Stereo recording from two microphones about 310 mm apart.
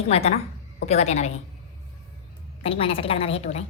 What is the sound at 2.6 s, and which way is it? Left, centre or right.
A woman's voice, centre.